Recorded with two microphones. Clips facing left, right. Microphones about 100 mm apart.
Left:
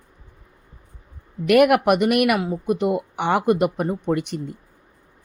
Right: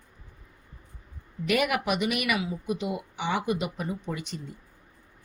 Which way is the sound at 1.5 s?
60° left (ahead or behind).